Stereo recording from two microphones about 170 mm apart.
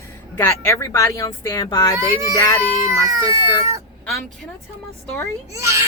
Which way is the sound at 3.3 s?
20° right (ahead or behind).